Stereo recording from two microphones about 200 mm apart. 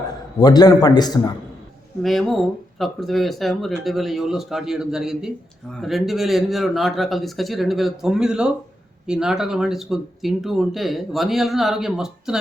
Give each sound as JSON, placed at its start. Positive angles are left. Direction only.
{"t": 0.3, "sound": "a man's voice", "side_deg": 20}
{"t": 2.0, "sound": "speech", "side_deg": 0}